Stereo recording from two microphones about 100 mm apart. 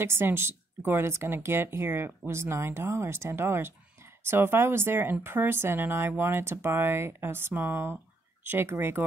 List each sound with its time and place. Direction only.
0.0 s speech: 25° right (ahead or behind)